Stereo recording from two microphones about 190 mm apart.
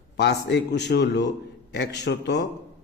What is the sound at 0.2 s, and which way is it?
Speech, 65° left (ahead or behind).